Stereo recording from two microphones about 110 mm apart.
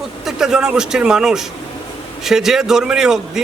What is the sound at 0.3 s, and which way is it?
A man's voice, 5° right (ahead or behind).